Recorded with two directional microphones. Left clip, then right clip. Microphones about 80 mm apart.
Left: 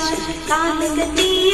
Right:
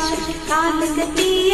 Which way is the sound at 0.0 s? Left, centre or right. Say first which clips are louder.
Even; left.